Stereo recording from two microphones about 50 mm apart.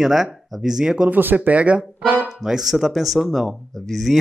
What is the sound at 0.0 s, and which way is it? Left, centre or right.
Speech, centre.